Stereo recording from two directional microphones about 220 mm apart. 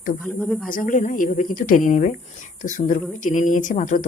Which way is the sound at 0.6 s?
35° left (ahead or behind).